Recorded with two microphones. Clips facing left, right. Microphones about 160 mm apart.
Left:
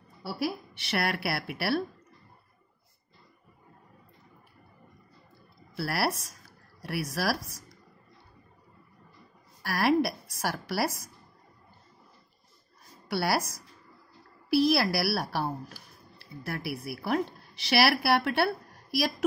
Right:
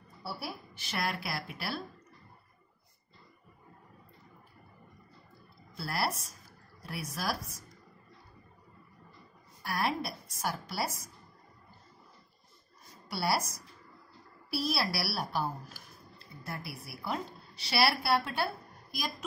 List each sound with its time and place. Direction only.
0.2 s a woman's voice: 90° left; by 1.9 s 65° left (ahead or behind)
5.8 s a woman's voice: 80° left
9.6 s a woman's voice: 80° left
13.1 s a woman's voice: 70° left (ahead or behind)
14.6 s a woman's voice: 65° left (ahead or behind)
16.2 s a woman's voice: 80° left